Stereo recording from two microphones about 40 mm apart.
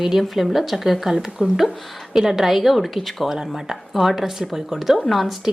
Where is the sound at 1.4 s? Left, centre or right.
Centre.